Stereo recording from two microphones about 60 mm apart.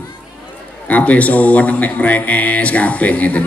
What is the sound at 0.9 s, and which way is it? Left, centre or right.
A man's voice, left.